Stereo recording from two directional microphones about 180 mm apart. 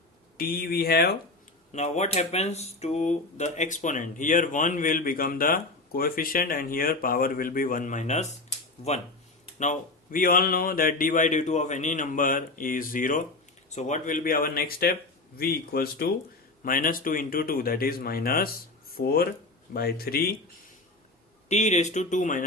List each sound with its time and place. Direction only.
0.3 s speech: 55° left (ahead or behind)
1.7 s speech: 40° left (ahead or behind)
9.6 s speech: 45° left (ahead or behind)
21.5 s speech: 40° left (ahead or behind)